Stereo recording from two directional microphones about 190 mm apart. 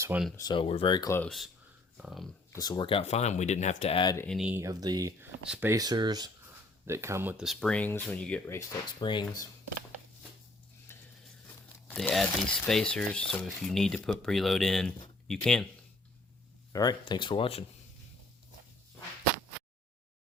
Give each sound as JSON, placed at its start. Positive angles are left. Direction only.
{"t": 0.0, "sound": "speech", "side_deg": -10}
{"t": 0.3, "sound": "speech", "side_deg": 20}
{"t": 1.2, "sound": "speech", "side_deg": 0}
{"t": 2.6, "sound": "speech", "side_deg": 20}
{"t": 4.4, "sound": "speech", "side_deg": -5}
{"t": 4.6, "sound": "speech", "side_deg": -20}
{"t": 10.9, "sound": "a sound", "side_deg": 15}
{"t": 11.9, "sound": "speech", "side_deg": 5}
{"t": 16.7, "sound": "speech", "side_deg": 20}